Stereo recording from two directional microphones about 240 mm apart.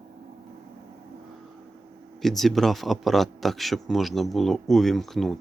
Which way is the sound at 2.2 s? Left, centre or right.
Centre.